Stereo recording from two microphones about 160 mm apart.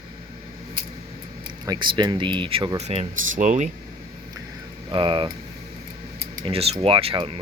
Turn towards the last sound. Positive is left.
turn(degrees=-35)  # may be behind; listen again after turning